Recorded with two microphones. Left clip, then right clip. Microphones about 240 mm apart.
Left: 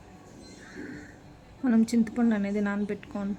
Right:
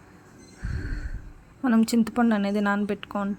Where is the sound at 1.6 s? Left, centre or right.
Centre.